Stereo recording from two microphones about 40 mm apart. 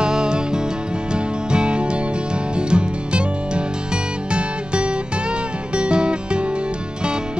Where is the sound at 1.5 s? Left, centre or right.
Right.